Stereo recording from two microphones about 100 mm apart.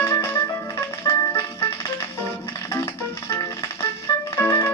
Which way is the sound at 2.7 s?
25° left (ahead or behind).